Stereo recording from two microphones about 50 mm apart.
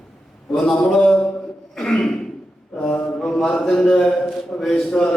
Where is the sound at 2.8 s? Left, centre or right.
Centre.